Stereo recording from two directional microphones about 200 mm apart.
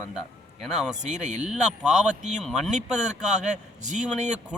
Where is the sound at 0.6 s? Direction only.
5° right (ahead or behind).